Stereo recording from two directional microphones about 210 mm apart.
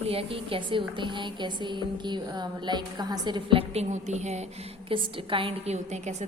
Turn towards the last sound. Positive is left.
turn(degrees=-35)  # may be behind; listen again after turning